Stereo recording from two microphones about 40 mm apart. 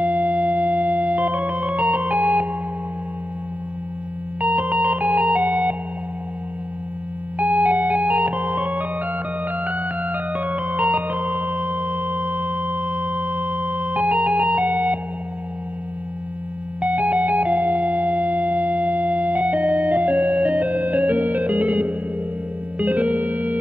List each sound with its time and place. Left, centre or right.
0.0 s music: right
4.4 s music: right
7.3 s music: right
16.8 s music: right